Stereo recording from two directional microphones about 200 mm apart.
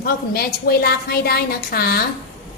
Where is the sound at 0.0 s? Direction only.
50° left (ahead or behind).